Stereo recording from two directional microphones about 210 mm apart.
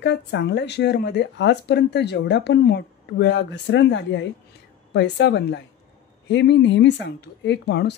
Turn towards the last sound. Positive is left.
turn(degrees=55)  # may be behind; listen again after turning